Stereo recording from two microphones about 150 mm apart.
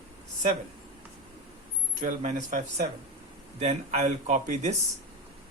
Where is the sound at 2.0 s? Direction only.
55° right (ahead or behind).